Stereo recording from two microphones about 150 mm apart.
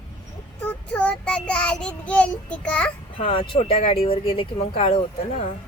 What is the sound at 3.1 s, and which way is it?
Speech, 35° left (ahead or behind).